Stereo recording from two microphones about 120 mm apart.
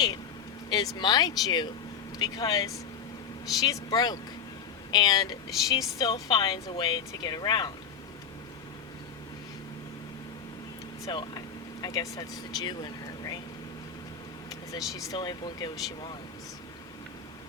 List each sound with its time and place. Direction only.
0.7 s a woman's voice: 35° left (ahead or behind)
11.0 s speech: 35° left (ahead or behind)
14.5 s vehicle: 30° left (ahead or behind)
14.9 s speech: 35° left (ahead or behind)